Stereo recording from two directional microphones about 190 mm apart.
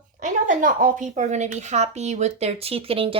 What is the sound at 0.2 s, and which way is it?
A woman's voice, 45° right (ahead or behind).